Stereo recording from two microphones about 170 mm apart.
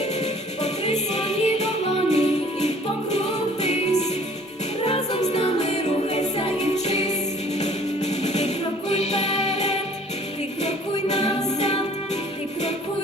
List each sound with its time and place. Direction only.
0.6 s music: 40° left (ahead or behind)
8.2 s music: 40° left (ahead or behind)